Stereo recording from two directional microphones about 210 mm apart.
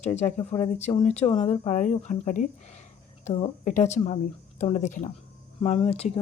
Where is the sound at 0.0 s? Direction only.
30° left (ahead or behind).